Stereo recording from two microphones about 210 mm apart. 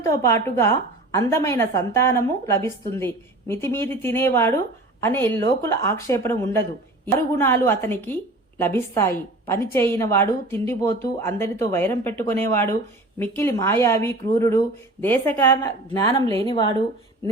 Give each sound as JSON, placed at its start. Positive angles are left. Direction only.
{"t": 0.0, "sound": "a woman's voice", "side_deg": 15}